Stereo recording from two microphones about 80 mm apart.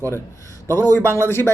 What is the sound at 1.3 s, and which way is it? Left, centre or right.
Speech, left.